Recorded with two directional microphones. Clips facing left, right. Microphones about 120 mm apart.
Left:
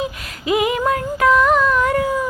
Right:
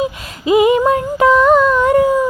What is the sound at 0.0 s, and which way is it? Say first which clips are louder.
Female singing: right 5 dB; 25° right (ahead or behind).